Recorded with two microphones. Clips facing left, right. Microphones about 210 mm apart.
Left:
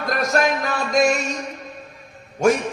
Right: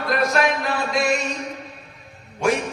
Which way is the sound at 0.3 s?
45° left (ahead or behind).